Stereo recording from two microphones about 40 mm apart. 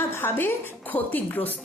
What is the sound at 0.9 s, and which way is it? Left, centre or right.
Speech, left.